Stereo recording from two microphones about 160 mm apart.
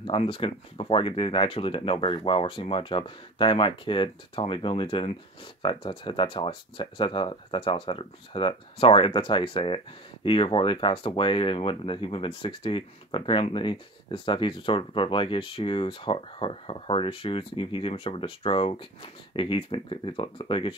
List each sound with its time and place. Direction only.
0.0 s speech: 35° left (ahead or behind)